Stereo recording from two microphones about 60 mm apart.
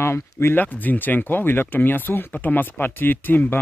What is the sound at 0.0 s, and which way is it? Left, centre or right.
Speech, left.